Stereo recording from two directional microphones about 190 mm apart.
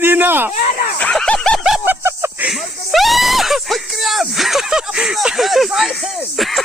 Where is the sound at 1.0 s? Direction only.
5° left (ahead or behind).